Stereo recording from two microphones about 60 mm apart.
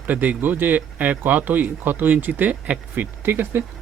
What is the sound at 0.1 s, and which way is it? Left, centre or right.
Speech, right.